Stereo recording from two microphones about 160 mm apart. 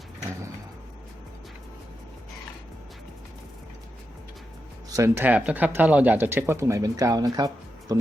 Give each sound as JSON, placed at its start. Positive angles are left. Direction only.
{"t": 4.9, "sound": "speech", "side_deg": -15}